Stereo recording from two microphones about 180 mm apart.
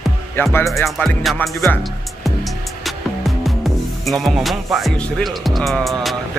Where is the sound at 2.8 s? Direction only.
Centre (ahead or behind).